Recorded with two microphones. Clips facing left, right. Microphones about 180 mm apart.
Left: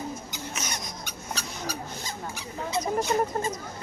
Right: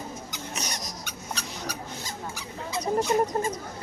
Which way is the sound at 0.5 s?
35° right (ahead or behind).